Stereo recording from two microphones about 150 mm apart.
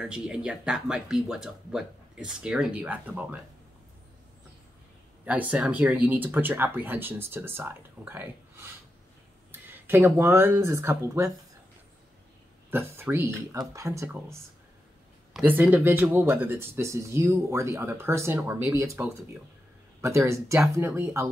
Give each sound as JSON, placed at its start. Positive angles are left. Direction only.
{"t": 0.0, "sound": "speech", "side_deg": -5}
{"t": 5.2, "sound": "speech", "side_deg": -10}
{"t": 12.7, "sound": "speech", "side_deg": -15}
{"t": 15.3, "sound": "speech", "side_deg": -10}